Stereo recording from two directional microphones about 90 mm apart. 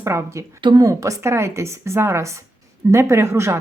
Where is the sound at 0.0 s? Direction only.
30° right (ahead or behind).